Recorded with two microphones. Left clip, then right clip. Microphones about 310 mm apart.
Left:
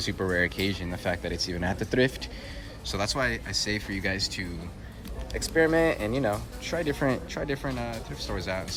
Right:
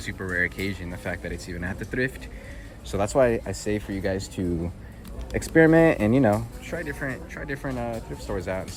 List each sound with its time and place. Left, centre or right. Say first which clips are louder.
0.0 s speech: even; centre
5.5 s speech: right 6 dB; right
6.7 s speech: left 5 dB; centre